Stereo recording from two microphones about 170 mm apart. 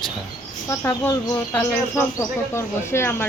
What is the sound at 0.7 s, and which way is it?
Speech, 15° left (ahead or behind).